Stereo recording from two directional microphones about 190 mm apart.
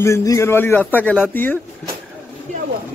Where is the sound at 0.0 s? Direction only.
15° left (ahead or behind).